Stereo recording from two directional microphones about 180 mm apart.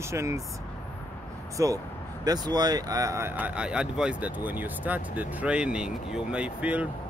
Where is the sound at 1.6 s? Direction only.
20° right (ahead or behind).